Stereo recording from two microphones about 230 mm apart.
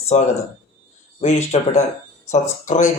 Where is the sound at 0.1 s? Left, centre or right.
Left.